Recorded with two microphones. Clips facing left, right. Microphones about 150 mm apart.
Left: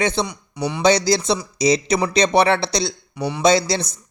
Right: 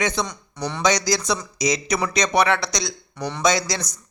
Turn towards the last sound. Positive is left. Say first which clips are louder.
# left 5 dB
turn(degrees=30)  # may be behind; listen again after turning